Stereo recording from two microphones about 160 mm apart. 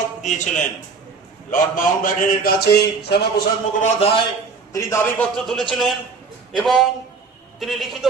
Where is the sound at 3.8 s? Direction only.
40° left (ahead or behind).